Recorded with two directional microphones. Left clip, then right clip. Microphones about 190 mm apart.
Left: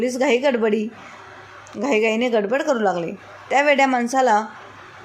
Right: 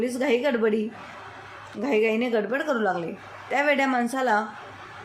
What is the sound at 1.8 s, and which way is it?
A woman's voice, 25° left (ahead or behind).